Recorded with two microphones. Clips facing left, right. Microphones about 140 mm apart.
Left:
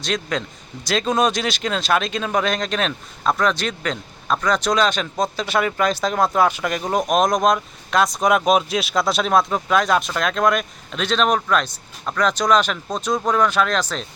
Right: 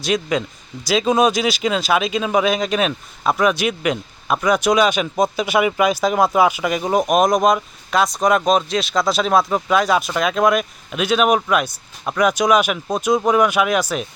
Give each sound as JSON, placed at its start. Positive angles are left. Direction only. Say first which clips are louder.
{"t": 0.0, "sound": "speech", "louder": "right 4 dB", "side_deg": -10}